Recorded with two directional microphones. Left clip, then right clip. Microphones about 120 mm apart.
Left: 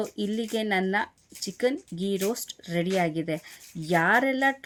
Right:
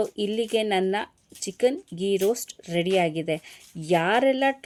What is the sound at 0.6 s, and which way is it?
Speech, 35° right (ahead or behind).